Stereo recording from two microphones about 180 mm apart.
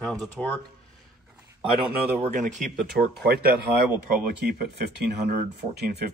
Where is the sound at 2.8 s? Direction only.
60° right (ahead or behind).